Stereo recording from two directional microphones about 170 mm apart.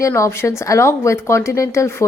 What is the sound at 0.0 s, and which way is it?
A woman's voice, 15° left (ahead or behind).